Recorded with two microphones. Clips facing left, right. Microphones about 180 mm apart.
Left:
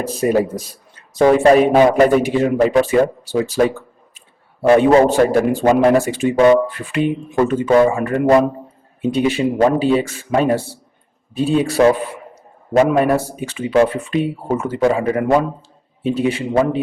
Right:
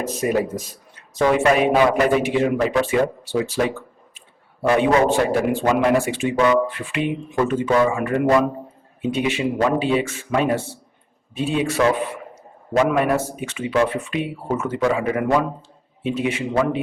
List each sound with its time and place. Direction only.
0.0 s a man's voice: 35° left (ahead or behind)
4.7 s a man's voice: 35° left (ahead or behind)
12.9 s a man's voice: 35° left (ahead or behind)